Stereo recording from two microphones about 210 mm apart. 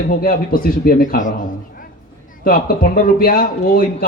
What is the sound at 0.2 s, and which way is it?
A man's voice, 45° left (ahead or behind).